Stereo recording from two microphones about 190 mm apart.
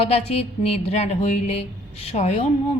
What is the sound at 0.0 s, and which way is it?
Speech, 30° left (ahead or behind).